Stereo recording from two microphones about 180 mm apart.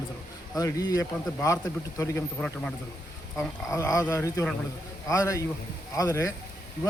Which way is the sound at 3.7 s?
15° left (ahead or behind).